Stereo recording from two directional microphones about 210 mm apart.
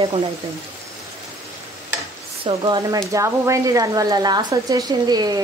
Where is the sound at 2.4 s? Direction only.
20° right (ahead or behind).